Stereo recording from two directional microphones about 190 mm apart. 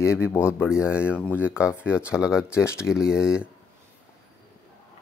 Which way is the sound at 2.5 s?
15° left (ahead or behind).